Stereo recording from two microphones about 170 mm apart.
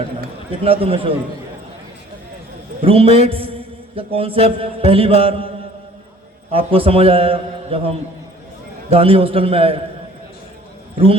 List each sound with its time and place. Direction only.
0.6 s mantra: 35° right (ahead or behind)
2.8 s mantra: 35° right (ahead or behind)
6.5 s mantra: 35° right (ahead or behind)
10.9 s a man's voice: 35° right (ahead or behind)